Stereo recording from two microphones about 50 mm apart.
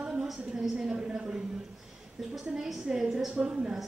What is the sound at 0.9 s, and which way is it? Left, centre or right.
Speech, right.